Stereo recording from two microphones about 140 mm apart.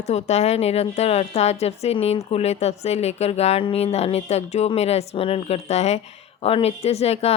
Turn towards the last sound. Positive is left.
turn(degrees=50)  # may be behind; listen again after turning